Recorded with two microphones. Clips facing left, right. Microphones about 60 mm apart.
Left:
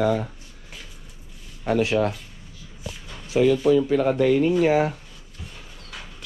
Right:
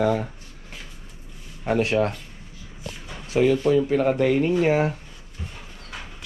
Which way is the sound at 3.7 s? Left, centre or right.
Right.